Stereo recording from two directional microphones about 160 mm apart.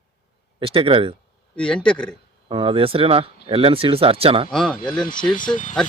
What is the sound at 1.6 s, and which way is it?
Speech, 5° left (ahead or behind).